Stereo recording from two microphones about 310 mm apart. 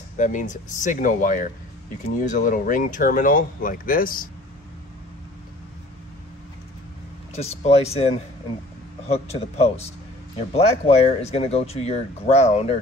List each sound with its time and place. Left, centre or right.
0.2 s speech: left
7.3 s speech: centre